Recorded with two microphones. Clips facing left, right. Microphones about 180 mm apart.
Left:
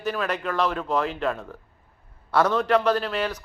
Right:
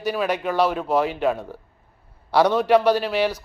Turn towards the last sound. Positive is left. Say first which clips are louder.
# right 4 dB
turn(degrees=-10)  # may be behind; listen again after turning